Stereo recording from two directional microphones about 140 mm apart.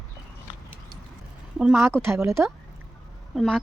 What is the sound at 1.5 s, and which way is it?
Speech, 5° right (ahead or behind).